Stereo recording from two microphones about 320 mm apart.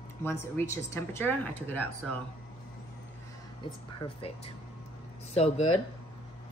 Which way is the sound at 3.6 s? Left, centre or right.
Centre.